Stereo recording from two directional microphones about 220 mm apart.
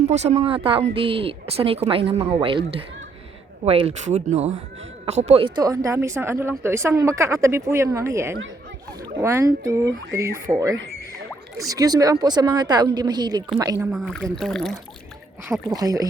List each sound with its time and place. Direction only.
0.1 s speech: 30° right (ahead or behind)
13.9 s speech: centre (ahead or behind)
15.7 s speech: 15° right (ahead or behind)